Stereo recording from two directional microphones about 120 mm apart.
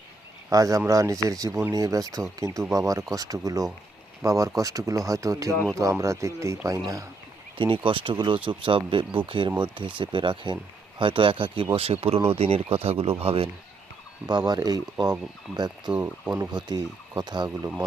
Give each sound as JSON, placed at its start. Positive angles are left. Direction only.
{"t": 0.5, "sound": "speech", "side_deg": -30}
{"t": 7.6, "sound": "speech", "side_deg": -45}
{"t": 14.3, "sound": "speech", "side_deg": -35}
{"t": 15.9, "sound": "speech", "side_deg": -10}
{"t": 16.3, "sound": "speech", "side_deg": -30}